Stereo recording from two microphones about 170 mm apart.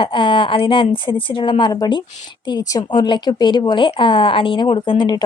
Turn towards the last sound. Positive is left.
turn(degrees=25)  # may be behind; listen again after turning